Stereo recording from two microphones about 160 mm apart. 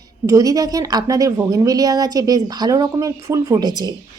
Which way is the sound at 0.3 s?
20° right (ahead or behind).